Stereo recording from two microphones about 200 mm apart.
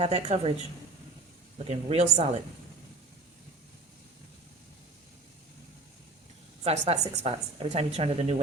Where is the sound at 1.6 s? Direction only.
30° right (ahead or behind).